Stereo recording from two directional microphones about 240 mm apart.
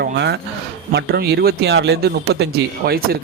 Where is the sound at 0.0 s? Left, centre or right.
Right.